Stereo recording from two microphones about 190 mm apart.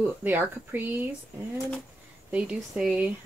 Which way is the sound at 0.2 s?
10° right (ahead or behind).